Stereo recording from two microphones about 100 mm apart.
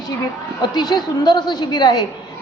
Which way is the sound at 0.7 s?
45° left (ahead or behind).